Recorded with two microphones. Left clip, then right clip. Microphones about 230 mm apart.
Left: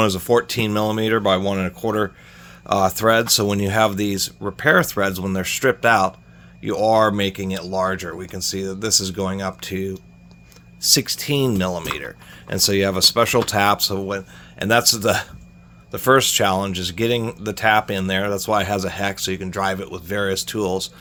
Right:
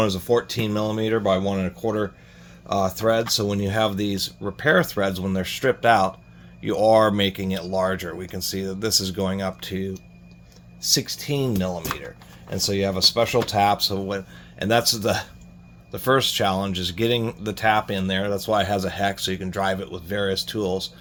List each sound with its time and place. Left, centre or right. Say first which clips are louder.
0.0 s speech: left 4 dB; left
10.8 s speech: left 5 dB; left